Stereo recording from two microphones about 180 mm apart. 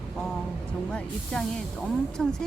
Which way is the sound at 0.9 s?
5° left (ahead or behind).